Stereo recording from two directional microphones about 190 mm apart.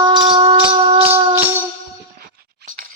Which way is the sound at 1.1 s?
10° right (ahead or behind).